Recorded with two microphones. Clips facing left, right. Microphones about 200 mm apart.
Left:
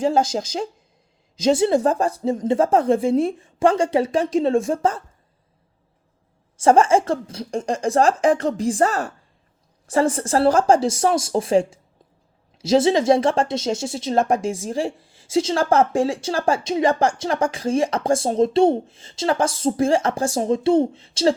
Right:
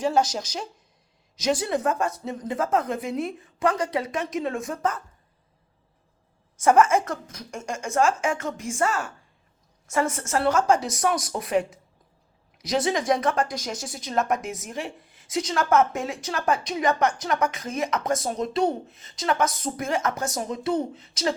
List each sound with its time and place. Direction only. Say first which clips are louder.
0.0 s speech: left 4 dB; 25° left (ahead or behind)
6.6 s speech: left 4 dB; 30° left (ahead or behind)